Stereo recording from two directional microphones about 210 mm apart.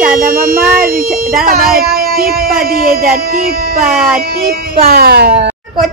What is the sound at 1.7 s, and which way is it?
Child singing, 45° right (ahead or behind).